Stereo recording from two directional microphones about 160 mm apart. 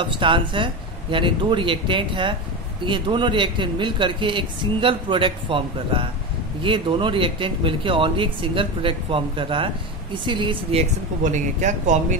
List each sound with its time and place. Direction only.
0.0 s speech: 30° right (ahead or behind); by 12.2 s 50° right (ahead or behind)